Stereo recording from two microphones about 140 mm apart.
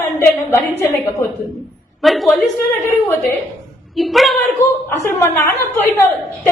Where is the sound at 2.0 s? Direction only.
Centre (ahead or behind).